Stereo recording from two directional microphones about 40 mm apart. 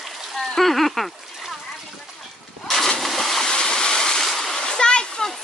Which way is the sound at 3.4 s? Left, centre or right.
Centre.